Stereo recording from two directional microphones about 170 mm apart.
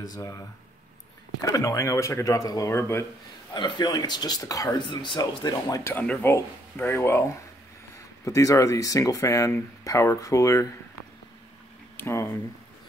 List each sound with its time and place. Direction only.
0.0 s speech: 20° left (ahead or behind)
12.0 s speech: 15° left (ahead or behind)